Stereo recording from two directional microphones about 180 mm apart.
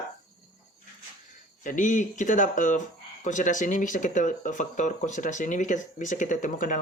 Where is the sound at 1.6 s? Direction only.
45° left (ahead or behind).